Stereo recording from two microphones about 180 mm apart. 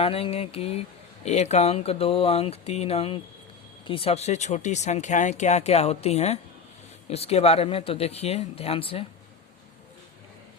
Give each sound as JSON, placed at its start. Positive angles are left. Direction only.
{"t": 0.0, "sound": "speech", "side_deg": 35}